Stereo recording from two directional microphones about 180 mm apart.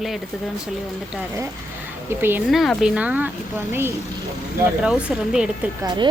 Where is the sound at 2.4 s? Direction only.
Centre (ahead or behind).